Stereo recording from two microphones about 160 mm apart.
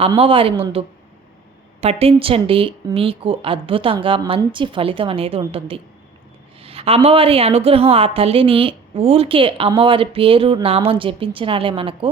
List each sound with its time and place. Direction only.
0.2 s a woman's voice: 35° right (ahead or behind)